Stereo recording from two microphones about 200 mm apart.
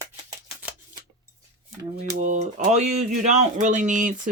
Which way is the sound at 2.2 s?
35° right (ahead or behind).